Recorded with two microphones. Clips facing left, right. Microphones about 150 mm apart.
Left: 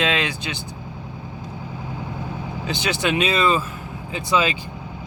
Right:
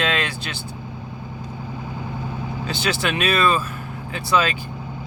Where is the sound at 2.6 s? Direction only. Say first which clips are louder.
Left 1 dB; 20° left (ahead or behind).